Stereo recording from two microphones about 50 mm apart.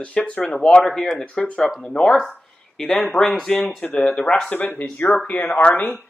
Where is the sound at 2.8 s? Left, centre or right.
Centre.